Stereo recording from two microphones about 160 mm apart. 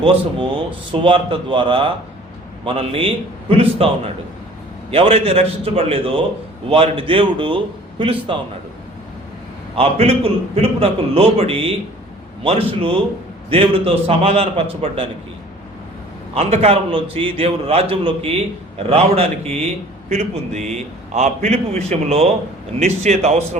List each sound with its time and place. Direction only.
0.0 s a man's voice: 30° right (ahead or behind)
9.7 s a man's voice: 40° right (ahead or behind)
16.3 s a man's voice: 40° right (ahead or behind)